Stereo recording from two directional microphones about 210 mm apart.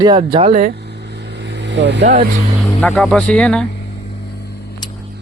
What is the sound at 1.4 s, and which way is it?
Vehicle, 55° right (ahead or behind).